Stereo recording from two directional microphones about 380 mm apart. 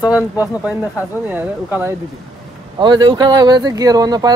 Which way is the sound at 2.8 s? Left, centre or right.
Centre.